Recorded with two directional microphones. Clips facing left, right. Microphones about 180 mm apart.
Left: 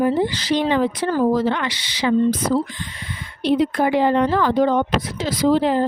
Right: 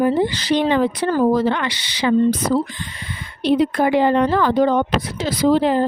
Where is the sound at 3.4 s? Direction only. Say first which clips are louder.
Right 1 dB; 65° right (ahead or behind).